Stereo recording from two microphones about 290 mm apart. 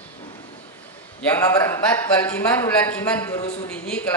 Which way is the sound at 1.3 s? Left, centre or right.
Centre.